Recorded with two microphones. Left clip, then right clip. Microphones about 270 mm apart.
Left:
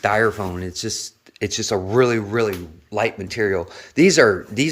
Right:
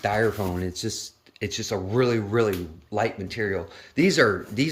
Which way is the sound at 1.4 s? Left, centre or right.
Centre.